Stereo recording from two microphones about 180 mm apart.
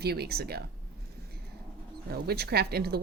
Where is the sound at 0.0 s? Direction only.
60° right (ahead or behind).